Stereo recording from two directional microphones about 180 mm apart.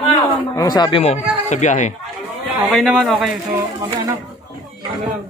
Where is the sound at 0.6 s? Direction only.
20° left (ahead or behind); by 2.0 s 40° left (ahead or behind).